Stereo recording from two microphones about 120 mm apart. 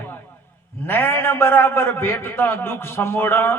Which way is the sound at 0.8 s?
20° left (ahead or behind).